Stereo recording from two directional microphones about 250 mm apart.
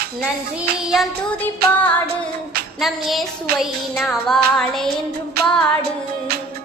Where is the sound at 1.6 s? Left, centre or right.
Right.